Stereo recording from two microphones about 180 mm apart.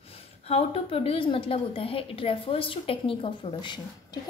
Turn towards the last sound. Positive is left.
turn(degrees=25)  # may be behind; listen again after turning